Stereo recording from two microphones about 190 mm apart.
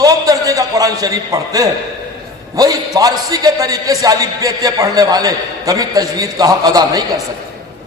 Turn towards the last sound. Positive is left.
turn(degrees=-20)  # may be behind; listen again after turning